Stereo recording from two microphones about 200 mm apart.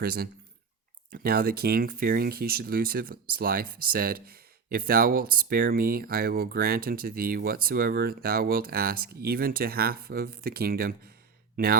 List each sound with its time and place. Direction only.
0.0 s speech: 50° right (ahead or behind)